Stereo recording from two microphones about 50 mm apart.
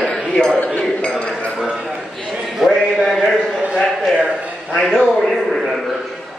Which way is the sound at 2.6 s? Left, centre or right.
Centre.